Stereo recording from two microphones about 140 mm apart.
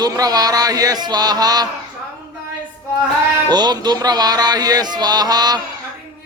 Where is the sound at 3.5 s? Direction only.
30° right (ahead or behind).